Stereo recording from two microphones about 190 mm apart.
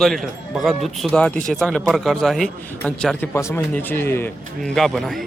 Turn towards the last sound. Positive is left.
turn(degrees=0)  # may be behind; listen again after turning